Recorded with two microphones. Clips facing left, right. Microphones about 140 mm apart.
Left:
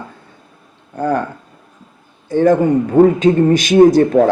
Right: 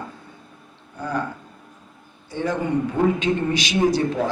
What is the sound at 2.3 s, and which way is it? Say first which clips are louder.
A man's voice: left 11 dB; 50° left (ahead or behind).